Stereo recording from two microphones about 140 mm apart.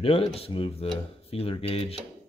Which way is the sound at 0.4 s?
45° left (ahead or behind).